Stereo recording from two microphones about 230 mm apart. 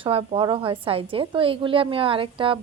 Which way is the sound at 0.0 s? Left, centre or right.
Right.